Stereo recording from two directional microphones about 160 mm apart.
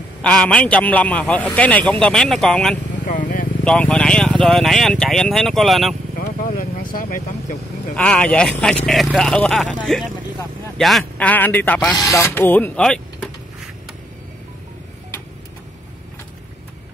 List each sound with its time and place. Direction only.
0.2 s a man's voice: 5° left (ahead or behind)
3.1 s vehicle: 55° left (ahead or behind)
3.6 s speech: 5° left (ahead or behind)
6.1 s vehicle: 60° left (ahead or behind)
7.9 s a man's voice: 5° left (ahead or behind)
12.0 s a man's voice: 20° left (ahead or behind)